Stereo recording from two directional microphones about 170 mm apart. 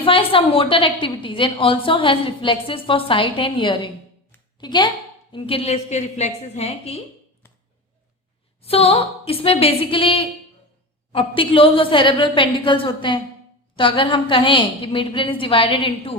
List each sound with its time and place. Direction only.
0.0 s a woman's voice: 30° left (ahead or behind)
8.6 s a woman's voice: 35° left (ahead or behind)